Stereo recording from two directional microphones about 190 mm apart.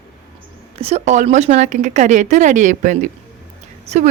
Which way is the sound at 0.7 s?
35° right (ahead or behind).